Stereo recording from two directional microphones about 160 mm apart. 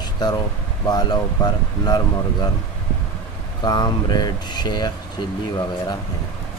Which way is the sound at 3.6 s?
25° left (ahead or behind).